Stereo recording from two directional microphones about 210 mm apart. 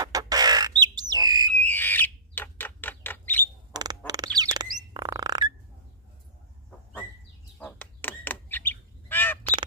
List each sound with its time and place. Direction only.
0.0 s squawk: 15° right (ahead or behind)
1.5 s bird: 10° left (ahead or behind)
3.7 s bird: 20° right (ahead or behind)
4.4 s a sound: 20° right (ahead or behind)
4.9 s music: 15° right (ahead or behind)
7.5 s bird: 5° left (ahead or behind)